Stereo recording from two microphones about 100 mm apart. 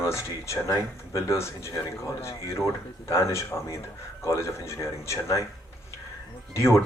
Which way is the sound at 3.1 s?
30° left (ahead or behind).